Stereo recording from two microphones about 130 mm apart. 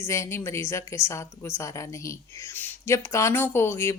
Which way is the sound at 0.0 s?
20° left (ahead or behind).